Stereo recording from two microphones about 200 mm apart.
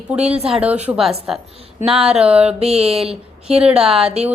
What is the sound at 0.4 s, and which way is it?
A woman's voice, 5° right (ahead or behind).